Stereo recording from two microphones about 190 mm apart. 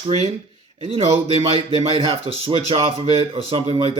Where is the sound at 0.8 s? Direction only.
30° right (ahead or behind).